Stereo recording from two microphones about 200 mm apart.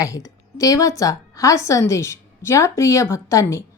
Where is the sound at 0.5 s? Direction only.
15° left (ahead or behind).